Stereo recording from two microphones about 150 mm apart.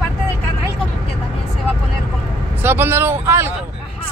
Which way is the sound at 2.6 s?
15° right (ahead or behind).